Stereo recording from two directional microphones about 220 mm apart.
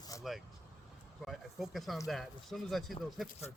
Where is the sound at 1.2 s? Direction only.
Centre (ahead or behind).